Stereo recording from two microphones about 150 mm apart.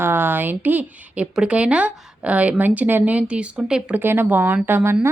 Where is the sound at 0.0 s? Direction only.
15° right (ahead or behind).